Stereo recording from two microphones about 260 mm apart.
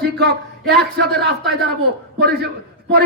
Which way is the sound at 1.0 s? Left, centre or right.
Right.